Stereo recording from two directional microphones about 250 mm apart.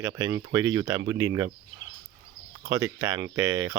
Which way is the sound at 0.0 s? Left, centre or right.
Centre.